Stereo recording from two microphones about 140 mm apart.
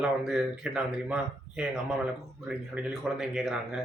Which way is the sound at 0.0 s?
5° right (ahead or behind).